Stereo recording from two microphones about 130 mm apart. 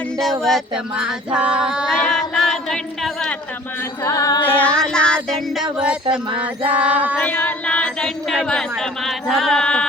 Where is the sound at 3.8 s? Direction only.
25° left (ahead or behind).